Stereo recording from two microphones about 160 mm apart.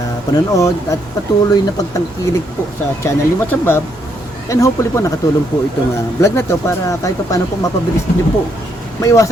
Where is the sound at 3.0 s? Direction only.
15° left (ahead or behind).